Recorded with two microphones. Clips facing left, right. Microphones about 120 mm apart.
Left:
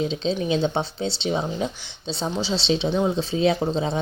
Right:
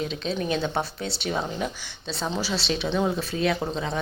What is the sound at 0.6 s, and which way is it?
Speech, 25° left (ahead or behind).